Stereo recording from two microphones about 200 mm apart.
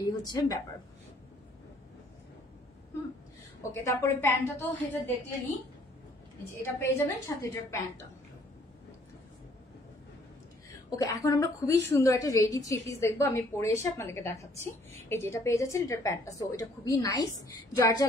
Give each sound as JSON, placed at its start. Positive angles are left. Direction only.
{"t": 0.0, "sound": "a woman's voice", "side_deg": 20}
{"t": 3.7, "sound": "a woman's voice", "side_deg": 10}
{"t": 6.6, "sound": "a woman's voice", "side_deg": 15}
{"t": 11.0, "sound": "a woman's voice", "side_deg": 15}